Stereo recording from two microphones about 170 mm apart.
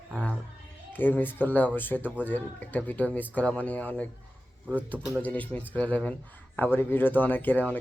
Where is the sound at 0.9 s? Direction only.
10° left (ahead or behind).